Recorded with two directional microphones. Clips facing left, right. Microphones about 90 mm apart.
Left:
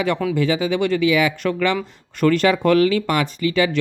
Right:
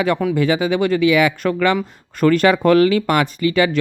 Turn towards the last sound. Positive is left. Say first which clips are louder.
# right 2 dB
turn(degrees=-50)  # may be behind; listen again after turning